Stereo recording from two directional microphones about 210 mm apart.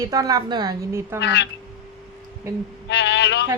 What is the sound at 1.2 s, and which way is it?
Speech, 55° left (ahead or behind).